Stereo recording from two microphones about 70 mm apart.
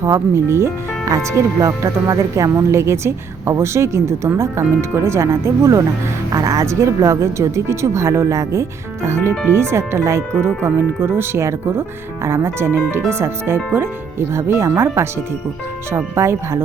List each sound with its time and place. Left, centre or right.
0.0 s speech: right
16.1 s speech: right